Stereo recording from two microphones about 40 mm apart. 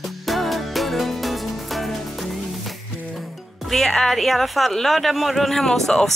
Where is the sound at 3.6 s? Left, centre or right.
Centre.